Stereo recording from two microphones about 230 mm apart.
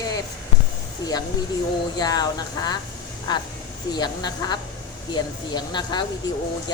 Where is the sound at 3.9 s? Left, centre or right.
Centre.